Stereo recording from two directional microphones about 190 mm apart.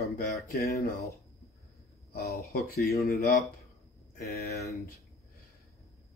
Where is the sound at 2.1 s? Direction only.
55° left (ahead or behind).